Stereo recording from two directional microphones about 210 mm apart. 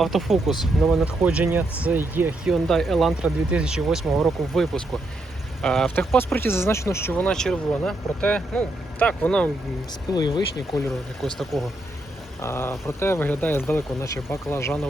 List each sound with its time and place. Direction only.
0.0 s speech: centre (ahead or behind)
2.6 s speech: centre (ahead or behind)
10.2 s speech: 20° left (ahead or behind)
11.2 s speech: centre (ahead or behind)
12.4 s speech: 10° left (ahead or behind)